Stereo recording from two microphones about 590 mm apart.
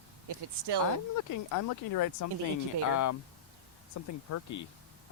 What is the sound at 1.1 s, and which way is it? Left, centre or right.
Speech, left.